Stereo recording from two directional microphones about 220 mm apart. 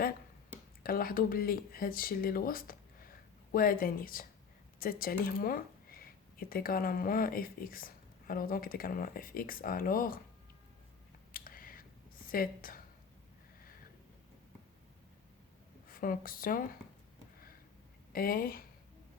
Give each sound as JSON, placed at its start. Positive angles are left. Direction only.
{"t": 0.8, "sound": "speech", "side_deg": 40}
{"t": 11.3, "sound": "a sound", "side_deg": 40}
{"t": 12.3, "sound": "speech", "side_deg": 40}
{"t": 15.9, "sound": "speech", "side_deg": 40}
{"t": 18.1, "sound": "speech", "side_deg": 40}